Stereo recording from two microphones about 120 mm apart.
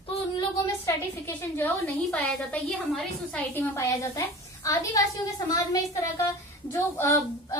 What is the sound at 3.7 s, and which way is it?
A woman's voice, 25° left (ahead or behind).